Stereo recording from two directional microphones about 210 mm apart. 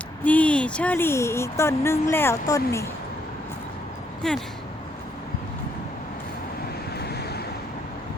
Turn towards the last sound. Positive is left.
turn(degrees=50)  # may be behind; listen again after turning